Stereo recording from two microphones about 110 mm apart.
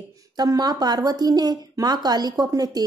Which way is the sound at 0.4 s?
35° right (ahead or behind).